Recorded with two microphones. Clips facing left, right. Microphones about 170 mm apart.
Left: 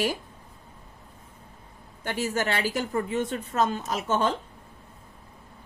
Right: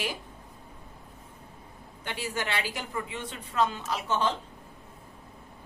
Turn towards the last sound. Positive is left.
turn(degrees=45)  # may be behind; listen again after turning